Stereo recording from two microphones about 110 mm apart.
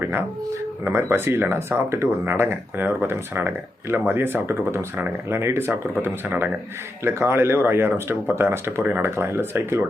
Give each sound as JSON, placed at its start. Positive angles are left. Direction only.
{"t": 0.0, "sound": "speech", "side_deg": -20}